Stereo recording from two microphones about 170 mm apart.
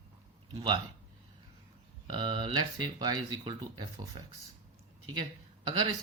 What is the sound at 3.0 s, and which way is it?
Speech, 25° right (ahead or behind).